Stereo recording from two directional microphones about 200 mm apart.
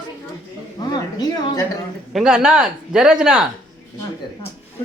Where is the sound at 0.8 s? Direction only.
20° left (ahead or behind).